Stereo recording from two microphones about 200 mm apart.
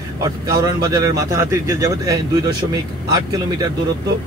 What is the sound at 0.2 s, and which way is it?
Speech, 20° right (ahead or behind).